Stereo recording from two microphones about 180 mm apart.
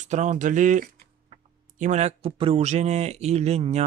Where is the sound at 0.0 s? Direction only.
40° right (ahead or behind).